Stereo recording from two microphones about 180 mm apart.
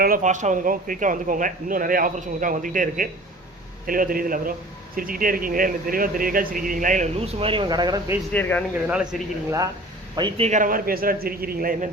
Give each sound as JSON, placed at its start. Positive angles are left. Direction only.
{"t": 0.0, "sound": "a man's voice", "side_deg": -50}
{"t": 8.3, "sound": "speech", "side_deg": 10}
{"t": 9.1, "sound": "speech", "side_deg": 0}
{"t": 10.2, "sound": "a man's voice", "side_deg": -30}